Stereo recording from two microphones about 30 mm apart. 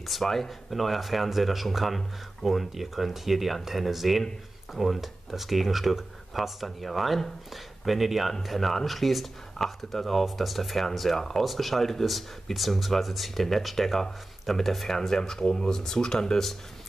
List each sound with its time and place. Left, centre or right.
0.0 s speech: centre
15.0 s speech: centre